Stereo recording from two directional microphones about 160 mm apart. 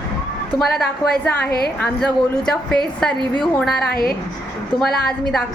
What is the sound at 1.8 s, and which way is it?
A woman's voice, 5° left (ahead or behind).